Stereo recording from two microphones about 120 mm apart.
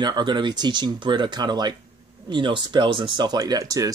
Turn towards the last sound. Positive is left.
turn(degrees=-30)  # may be behind; listen again after turning